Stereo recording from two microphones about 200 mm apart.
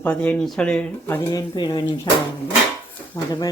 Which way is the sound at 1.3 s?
20° left (ahead or behind).